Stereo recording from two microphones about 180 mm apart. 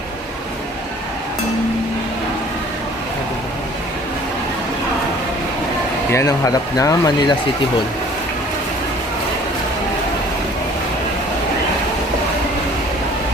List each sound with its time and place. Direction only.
6.1 s speech: 15° left (ahead or behind)